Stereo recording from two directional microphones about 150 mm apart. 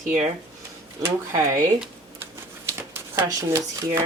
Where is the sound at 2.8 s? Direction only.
20° right (ahead or behind).